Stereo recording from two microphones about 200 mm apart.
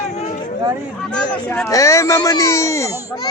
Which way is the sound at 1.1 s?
5° left (ahead or behind).